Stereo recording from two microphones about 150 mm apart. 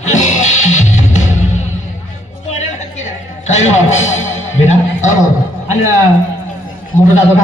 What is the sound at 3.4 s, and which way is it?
A man's voice, 50° left (ahead or behind).